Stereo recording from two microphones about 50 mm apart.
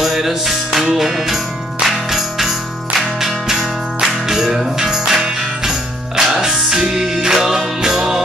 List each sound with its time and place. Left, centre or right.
0.0 s music: centre